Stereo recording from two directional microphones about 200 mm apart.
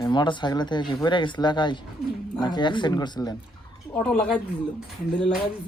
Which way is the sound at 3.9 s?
5° left (ahead or behind).